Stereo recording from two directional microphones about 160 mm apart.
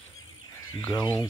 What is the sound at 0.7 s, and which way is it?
Speech, 25° left (ahead or behind).